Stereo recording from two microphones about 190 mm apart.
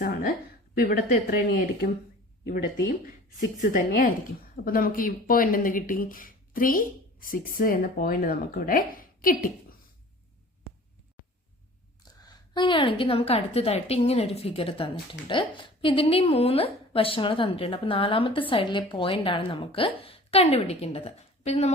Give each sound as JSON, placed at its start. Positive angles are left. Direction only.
{"t": 0.8, "sound": "speech", "side_deg": 50}
{"t": 3.6, "sound": "speech", "side_deg": 45}
{"t": 12.3, "sound": "a woman's voice", "side_deg": 25}